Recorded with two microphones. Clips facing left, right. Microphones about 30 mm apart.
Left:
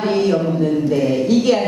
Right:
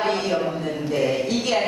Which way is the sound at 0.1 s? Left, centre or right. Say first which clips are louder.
Left 6 dB; centre.